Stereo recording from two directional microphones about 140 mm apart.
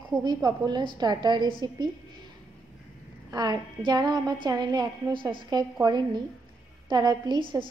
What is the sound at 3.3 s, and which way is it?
A woman's voice, 30° right (ahead or behind).